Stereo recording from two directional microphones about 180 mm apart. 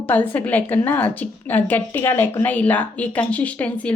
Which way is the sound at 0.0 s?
10° left (ahead or behind).